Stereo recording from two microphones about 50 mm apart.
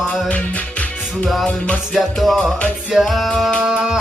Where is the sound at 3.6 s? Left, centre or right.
Centre.